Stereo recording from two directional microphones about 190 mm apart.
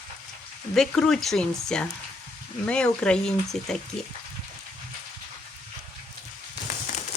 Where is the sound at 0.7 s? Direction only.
5° left (ahead or behind).